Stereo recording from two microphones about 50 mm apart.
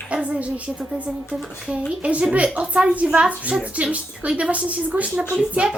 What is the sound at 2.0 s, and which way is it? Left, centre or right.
A woman's voice, right.